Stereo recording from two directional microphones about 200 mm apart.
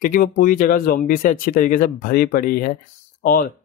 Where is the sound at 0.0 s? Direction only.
45° left (ahead or behind).